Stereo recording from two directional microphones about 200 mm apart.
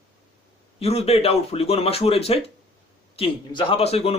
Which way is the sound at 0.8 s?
30° left (ahead or behind).